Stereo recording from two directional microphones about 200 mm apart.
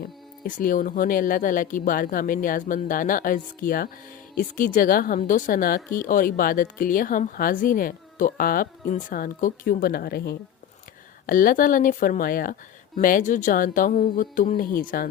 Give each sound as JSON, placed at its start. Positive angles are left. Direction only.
{"t": 0.0, "sound": "a woman's voice", "side_deg": 45}